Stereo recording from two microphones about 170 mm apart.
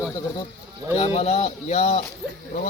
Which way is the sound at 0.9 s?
40° left (ahead or behind).